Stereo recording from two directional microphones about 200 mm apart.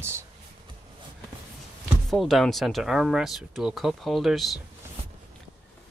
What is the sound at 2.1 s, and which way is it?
Speech, centre (ahead or behind).